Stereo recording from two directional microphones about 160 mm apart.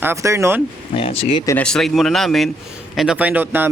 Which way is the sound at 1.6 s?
5° left (ahead or behind).